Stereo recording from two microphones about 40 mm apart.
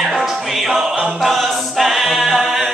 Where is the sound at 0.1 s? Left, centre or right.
Centre.